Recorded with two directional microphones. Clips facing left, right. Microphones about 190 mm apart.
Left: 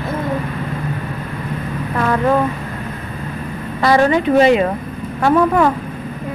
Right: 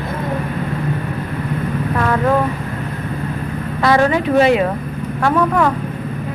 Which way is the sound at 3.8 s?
Centre (ahead or behind).